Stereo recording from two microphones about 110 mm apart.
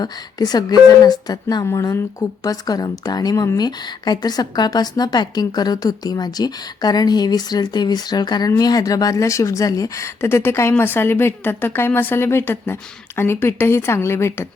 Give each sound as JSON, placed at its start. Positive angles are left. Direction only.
{"t": 0.0, "sound": "a woman's voice", "side_deg": 35}